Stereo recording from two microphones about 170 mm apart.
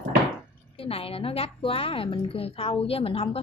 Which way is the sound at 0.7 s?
35° left (ahead or behind).